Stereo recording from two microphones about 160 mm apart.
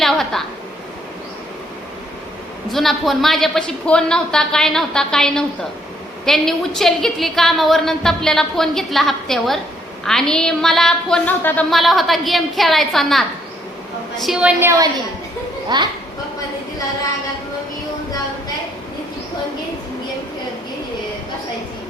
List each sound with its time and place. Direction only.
0.0 s a sound: centre (ahead or behind)
2.6 s a woman's voice: centre (ahead or behind)
15.7 s speech: 25° right (ahead or behind)